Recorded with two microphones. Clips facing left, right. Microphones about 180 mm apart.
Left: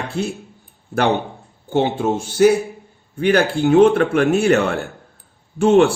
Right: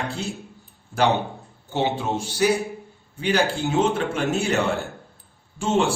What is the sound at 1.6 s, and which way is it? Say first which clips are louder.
A man's voice: left 6 dB; 50° left (ahead or behind).